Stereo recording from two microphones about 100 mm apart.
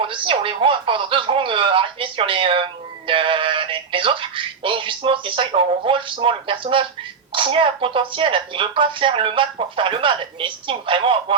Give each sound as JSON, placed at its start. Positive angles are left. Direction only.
{"t": 0.0, "sound": "a woman's voice", "side_deg": -60}